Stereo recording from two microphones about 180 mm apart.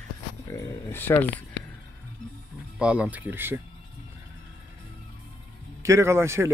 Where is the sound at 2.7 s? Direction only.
5° right (ahead or behind).